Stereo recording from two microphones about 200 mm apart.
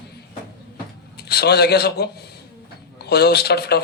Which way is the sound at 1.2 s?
55° left (ahead or behind).